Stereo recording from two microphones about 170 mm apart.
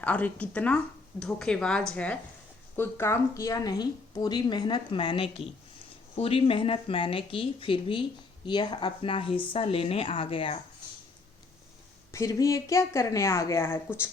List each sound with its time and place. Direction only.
0.0 s speech: 10° left (ahead or behind); by 10.6 s 35° left (ahead or behind)
12.1 s speech: 15° left (ahead or behind)